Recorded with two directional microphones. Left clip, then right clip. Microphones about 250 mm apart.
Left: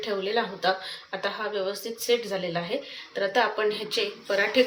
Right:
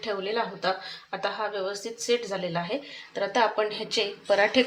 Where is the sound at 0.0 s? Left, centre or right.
Right.